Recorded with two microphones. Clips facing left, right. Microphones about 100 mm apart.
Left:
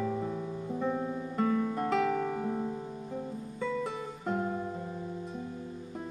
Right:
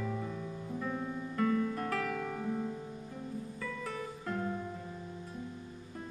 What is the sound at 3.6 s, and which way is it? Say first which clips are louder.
Music: left 9 dB; 20° left (ahead or behind).